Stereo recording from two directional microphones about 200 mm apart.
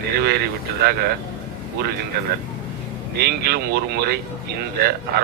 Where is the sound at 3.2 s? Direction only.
55° right (ahead or behind).